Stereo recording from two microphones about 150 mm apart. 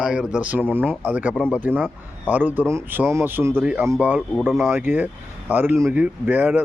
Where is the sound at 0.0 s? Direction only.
5° right (ahead or behind).